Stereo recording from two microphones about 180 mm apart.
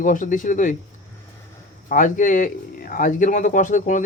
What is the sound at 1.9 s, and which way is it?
Speech, 45° left (ahead or behind).